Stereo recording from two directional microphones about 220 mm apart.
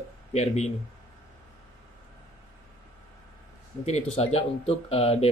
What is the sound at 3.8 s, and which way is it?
Speech, 30° left (ahead or behind).